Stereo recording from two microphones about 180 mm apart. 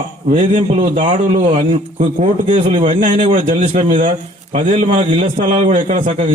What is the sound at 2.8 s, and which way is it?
A man's voice, 45° right (ahead or behind).